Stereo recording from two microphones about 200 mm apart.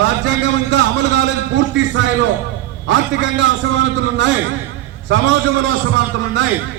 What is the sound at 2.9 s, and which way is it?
A man's voice, 65° right (ahead or behind).